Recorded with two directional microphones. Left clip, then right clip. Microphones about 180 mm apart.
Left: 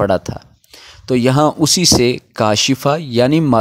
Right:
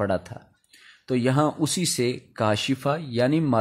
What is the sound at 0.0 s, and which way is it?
Speech, 40° left (ahead or behind).